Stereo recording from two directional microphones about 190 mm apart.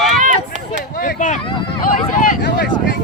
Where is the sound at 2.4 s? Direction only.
60° left (ahead or behind).